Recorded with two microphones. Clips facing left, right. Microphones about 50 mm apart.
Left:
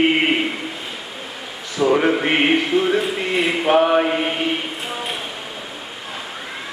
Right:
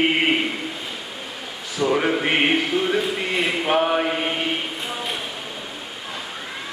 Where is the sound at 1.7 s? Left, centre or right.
Centre.